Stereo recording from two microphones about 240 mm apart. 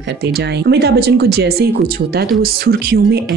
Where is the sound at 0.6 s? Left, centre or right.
Right.